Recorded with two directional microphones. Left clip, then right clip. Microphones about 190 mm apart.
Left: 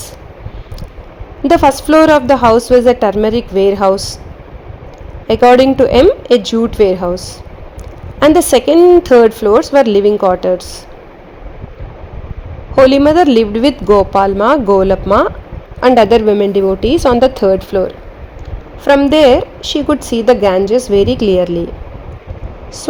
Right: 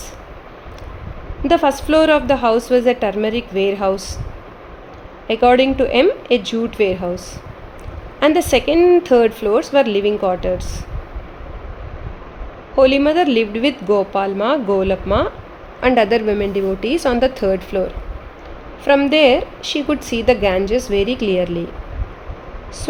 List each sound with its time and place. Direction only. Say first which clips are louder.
1.5 s a woman's voice: left 6 dB; 35° left (ahead or behind)
5.3 s a woman's voice: left 6 dB; 35° left (ahead or behind)
12.7 s a woman's voice: left 6 dB; 35° left (ahead or behind)